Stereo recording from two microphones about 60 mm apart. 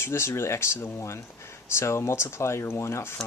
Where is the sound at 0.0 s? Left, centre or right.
Left.